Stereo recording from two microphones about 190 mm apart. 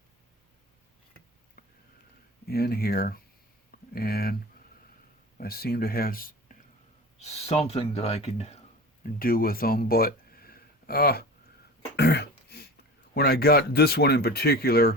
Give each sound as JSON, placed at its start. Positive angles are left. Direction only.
{"t": 2.5, "sound": "speech", "side_deg": 55}
{"t": 5.4, "sound": "speech", "side_deg": 55}
{"t": 7.2, "sound": "speech", "side_deg": 35}
{"t": 9.0, "sound": "speech", "side_deg": 50}
{"t": 11.9, "sound": "throat clearing", "side_deg": 60}
{"t": 13.1, "sound": "speech", "side_deg": 55}